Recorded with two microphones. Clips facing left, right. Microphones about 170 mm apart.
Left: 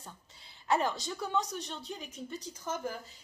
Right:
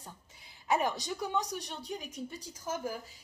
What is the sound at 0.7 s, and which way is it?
A woman's voice, 15° right (ahead or behind).